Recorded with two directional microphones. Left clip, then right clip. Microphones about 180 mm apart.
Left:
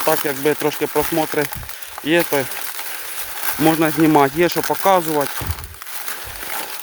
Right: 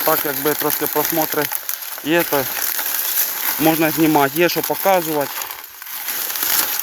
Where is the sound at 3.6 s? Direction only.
20° left (ahead or behind).